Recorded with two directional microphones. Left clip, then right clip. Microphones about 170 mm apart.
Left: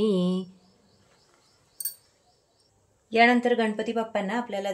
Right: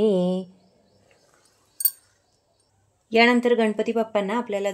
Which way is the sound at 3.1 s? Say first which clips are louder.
Right 2 dB; 45° right (ahead or behind).